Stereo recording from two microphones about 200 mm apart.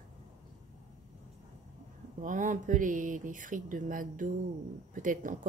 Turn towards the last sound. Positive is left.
turn(degrees=-40)  # may be behind; listen again after turning